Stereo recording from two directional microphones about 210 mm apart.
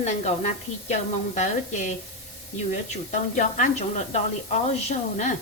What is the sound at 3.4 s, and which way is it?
A woman's voice, 35° left (ahead or behind).